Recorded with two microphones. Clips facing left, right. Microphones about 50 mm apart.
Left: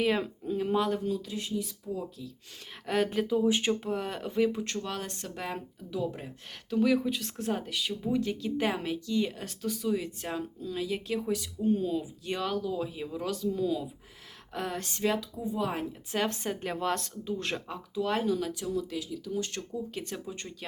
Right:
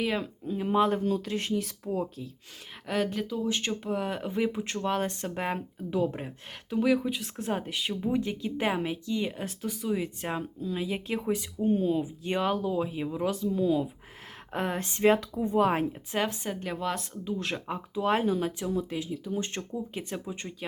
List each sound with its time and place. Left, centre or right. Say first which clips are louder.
0.0 s speech: left 2 dB; centre
0.5 s speech: even; centre
0.8 s speech: right 4 dB; right
2.8 s speech: left 1 dB; centre
3.1 s speech: left 4 dB; centre
3.8 s speech: right 2 dB; centre
4.9 s speech: right 7 dB; right
6.7 s speech: even; centre
10.2 s speech: right 2 dB; right
15.2 s speech: right 7 dB; right
16.2 s speech: even; centre
17.7 s speech: right 6 dB; right